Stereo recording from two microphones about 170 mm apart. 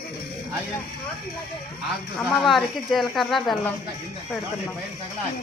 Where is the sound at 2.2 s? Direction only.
Centre (ahead or behind).